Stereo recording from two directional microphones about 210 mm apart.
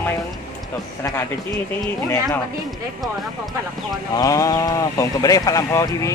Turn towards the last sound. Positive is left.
turn(degrees=15)  # may be behind; listen again after turning